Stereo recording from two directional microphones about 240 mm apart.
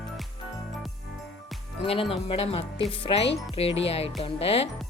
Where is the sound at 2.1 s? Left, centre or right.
Left.